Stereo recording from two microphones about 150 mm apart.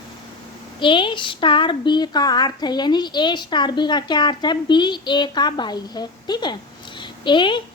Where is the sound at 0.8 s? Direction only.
35° left (ahead or behind).